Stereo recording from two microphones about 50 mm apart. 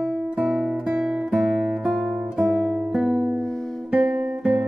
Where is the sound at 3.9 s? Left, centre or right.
Right.